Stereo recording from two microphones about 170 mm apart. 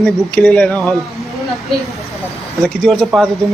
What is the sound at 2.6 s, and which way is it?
Speech, centre (ahead or behind).